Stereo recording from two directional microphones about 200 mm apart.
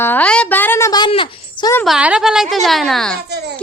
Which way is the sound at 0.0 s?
10° left (ahead or behind).